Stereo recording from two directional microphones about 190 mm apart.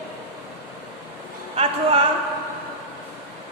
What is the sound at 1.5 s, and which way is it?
Speech, 30° right (ahead or behind).